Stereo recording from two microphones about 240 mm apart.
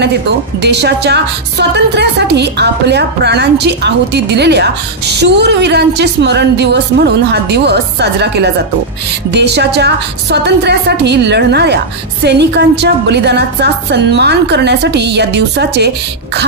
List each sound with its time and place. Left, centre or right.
0.6 s a woman's voice: right